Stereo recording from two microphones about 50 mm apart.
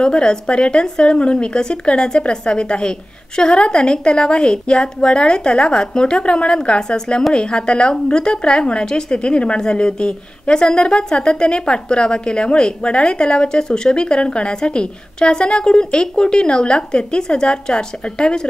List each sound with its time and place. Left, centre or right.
0.0 s a woman's voice: centre